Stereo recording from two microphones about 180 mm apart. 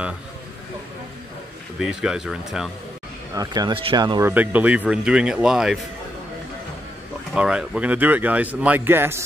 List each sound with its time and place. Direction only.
1.8 s speech: 5° right (ahead or behind)
3.3 s speech: 25° right (ahead or behind)
4.3 s speech: 10° right (ahead or behind)
7.3 s a man's voice: 5° right (ahead or behind)